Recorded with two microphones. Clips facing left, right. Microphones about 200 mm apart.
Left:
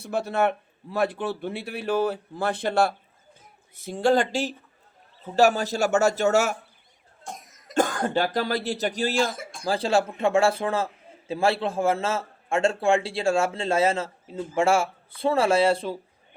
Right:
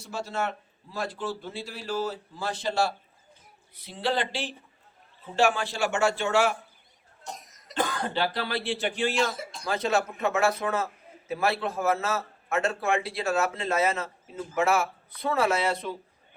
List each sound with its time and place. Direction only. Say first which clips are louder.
0.0 s a man's voice: left 7 dB; 60° left (ahead or behind)
9.6 s a man's voice: left 4 dB; 30° left (ahead or behind)